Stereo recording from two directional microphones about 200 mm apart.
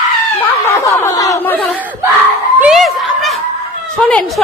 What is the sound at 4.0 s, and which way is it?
Speech, 5° left (ahead or behind).